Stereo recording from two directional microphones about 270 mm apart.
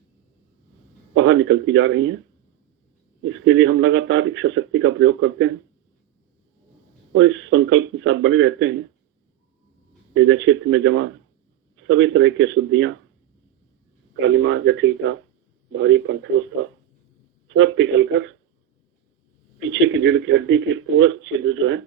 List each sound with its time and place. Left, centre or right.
1.1 s a man's voice: right
3.2 s a man's voice: right
7.1 s a man's voice: right
10.2 s a man's voice: right
14.2 s a man's voice: right
17.6 s a man's voice: right
19.5 s a man's voice: right